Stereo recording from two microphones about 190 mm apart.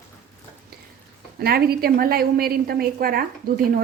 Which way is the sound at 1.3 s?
55° right (ahead or behind).